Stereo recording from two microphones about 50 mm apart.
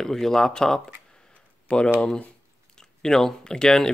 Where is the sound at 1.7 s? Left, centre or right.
Left.